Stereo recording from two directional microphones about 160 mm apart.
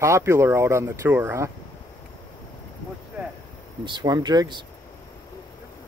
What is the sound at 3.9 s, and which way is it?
Speech, 25° right (ahead or behind).